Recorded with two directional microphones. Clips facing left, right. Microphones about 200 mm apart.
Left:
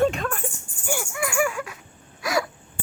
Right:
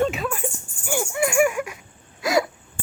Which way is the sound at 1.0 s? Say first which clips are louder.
Right 6 dB; 25° right (ahead or behind).